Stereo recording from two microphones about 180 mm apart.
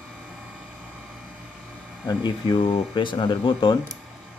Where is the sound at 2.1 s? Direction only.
25° left (ahead or behind).